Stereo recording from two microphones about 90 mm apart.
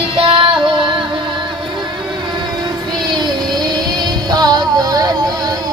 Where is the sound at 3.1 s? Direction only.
50° right (ahead or behind).